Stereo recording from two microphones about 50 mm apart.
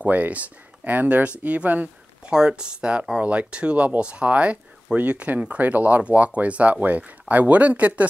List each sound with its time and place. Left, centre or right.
0.0 s speech: right
2.3 s speech: centre